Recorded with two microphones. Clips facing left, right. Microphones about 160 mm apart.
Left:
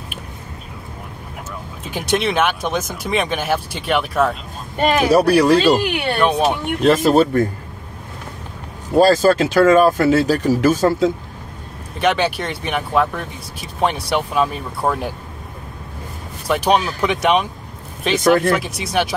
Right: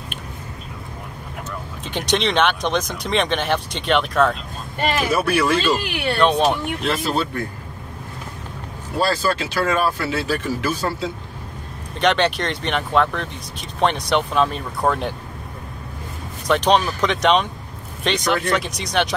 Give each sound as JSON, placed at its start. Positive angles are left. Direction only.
{"t": 1.9, "sound": "speech", "side_deg": 5}
{"t": 4.8, "sound": "speech", "side_deg": 60}
{"t": 5.1, "sound": "speech", "side_deg": 40}
{"t": 6.1, "sound": "speech", "side_deg": 5}
{"t": 6.8, "sound": "speech", "side_deg": 45}
{"t": 8.9, "sound": "speech", "side_deg": 45}
{"t": 12.0, "sound": "speech", "side_deg": 5}
{"t": 16.4, "sound": "speech", "side_deg": 10}
{"t": 18.2, "sound": "speech", "side_deg": 50}
{"t": 18.5, "sound": "speech", "side_deg": 5}